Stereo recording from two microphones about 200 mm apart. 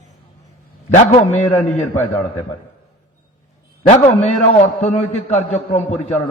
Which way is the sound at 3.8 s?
35° left (ahead or behind).